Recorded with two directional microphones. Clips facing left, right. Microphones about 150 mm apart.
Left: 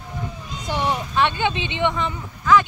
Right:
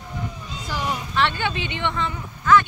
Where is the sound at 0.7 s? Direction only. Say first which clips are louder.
Left 4 dB; 25° left (ahead or behind).